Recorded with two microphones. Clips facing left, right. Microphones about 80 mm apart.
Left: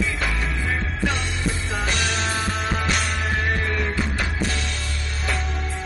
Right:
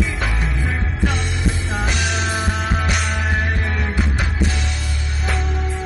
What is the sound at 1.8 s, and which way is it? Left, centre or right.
Music, centre.